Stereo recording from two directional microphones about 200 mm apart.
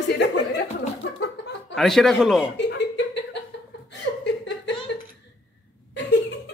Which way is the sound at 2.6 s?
60° left (ahead or behind).